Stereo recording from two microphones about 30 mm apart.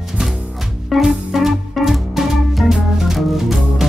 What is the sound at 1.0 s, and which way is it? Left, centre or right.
Music, centre.